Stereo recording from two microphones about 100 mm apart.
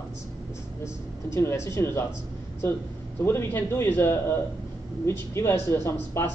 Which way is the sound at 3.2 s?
25° left (ahead or behind).